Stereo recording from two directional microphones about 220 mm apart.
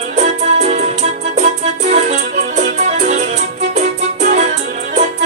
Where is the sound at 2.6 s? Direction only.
35° right (ahead or behind).